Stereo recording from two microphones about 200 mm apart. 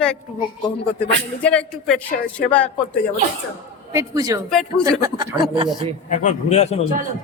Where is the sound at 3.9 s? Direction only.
15° right (ahead or behind).